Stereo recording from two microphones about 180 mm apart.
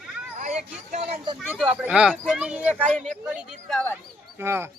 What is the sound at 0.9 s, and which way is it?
Speech, 40° right (ahead or behind).